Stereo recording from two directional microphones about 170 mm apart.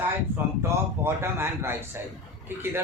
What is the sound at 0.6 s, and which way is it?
A man's voice, 15° right (ahead or behind).